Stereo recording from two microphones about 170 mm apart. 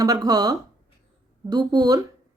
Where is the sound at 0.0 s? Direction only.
20° right (ahead or behind).